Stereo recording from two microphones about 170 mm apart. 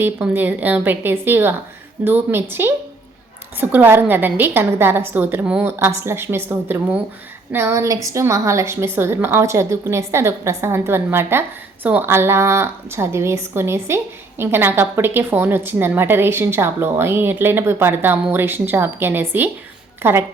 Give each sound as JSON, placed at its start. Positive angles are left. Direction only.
{"t": 0.0, "sound": "a woman's voice", "side_deg": -10}